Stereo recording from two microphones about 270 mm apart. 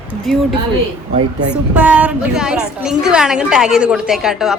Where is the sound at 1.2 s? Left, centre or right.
Right.